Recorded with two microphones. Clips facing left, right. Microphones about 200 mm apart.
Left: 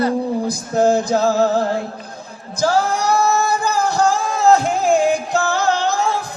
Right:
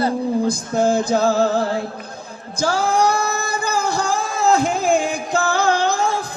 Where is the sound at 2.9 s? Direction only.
55° right (ahead or behind).